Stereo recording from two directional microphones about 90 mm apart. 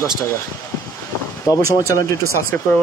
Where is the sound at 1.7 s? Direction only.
40° left (ahead or behind).